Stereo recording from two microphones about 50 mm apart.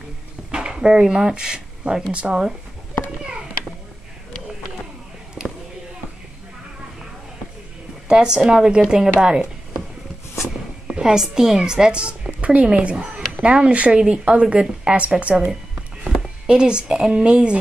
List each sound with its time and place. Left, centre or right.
0.5 s speech: centre
8.1 s a woman's voice: centre
15.7 s music: centre